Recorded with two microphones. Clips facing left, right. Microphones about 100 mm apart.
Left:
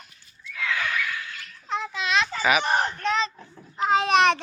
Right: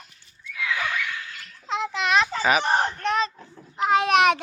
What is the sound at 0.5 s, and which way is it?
Neigh, 15° right (ahead or behind).